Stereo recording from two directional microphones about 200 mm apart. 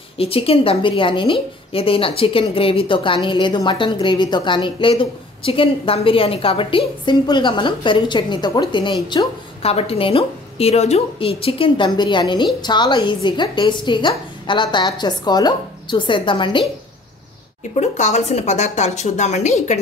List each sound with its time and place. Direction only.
0.2 s a woman's voice: 30° left (ahead or behind)
17.7 s a woman's voice: 35° left (ahead or behind)